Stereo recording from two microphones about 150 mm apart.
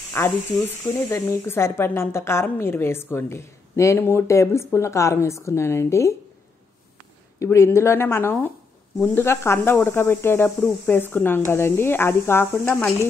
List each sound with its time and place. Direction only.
0.1 s speech: 15° left (ahead or behind)
7.3 s speech: 20° left (ahead or behind)